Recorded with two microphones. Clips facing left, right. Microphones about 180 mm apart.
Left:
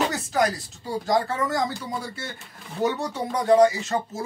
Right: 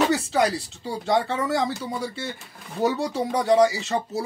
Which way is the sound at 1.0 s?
30° right (ahead or behind).